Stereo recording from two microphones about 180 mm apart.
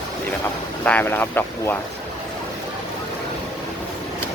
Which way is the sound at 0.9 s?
10° left (ahead or behind).